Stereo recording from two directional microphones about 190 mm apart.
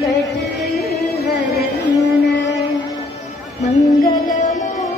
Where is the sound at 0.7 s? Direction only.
55° left (ahead or behind).